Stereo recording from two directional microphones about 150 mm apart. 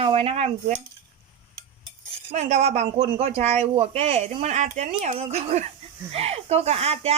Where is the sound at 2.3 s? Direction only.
50° right (ahead or behind).